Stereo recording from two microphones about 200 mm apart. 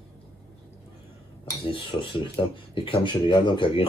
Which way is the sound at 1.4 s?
25° left (ahead or behind).